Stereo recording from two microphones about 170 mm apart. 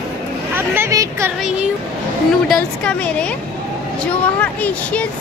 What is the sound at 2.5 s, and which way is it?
Speech, 5° left (ahead or behind).